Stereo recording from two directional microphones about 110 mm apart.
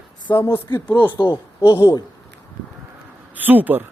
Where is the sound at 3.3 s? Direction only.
15° right (ahead or behind).